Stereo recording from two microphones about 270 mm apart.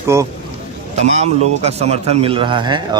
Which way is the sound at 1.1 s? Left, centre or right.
Right.